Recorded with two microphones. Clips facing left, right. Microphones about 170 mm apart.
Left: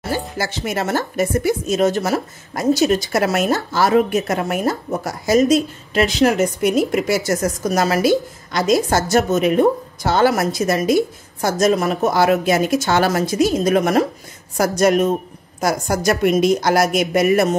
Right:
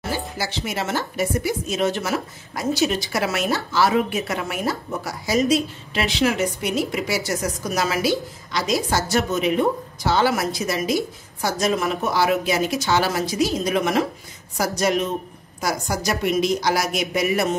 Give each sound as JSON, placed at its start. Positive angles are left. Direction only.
{"t": 0.4, "sound": "a woman's voice", "side_deg": 50}